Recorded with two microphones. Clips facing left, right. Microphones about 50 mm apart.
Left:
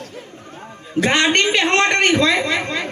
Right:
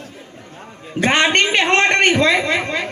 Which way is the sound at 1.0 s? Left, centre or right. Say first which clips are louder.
Right 1 dB; centre.